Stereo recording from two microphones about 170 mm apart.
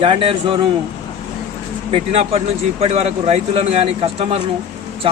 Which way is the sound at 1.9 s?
35° right (ahead or behind).